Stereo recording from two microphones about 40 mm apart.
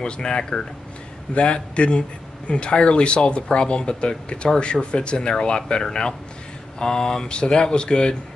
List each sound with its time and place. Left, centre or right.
0.0 s speech: left
6.8 s a sound: centre
7.2 s speech: left